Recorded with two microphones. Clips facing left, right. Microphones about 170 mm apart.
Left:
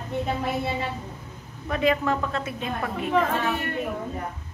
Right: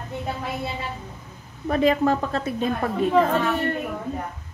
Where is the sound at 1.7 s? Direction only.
35° right (ahead or behind).